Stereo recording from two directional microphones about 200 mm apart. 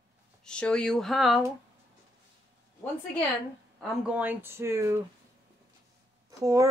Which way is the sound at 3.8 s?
5° right (ahead or behind).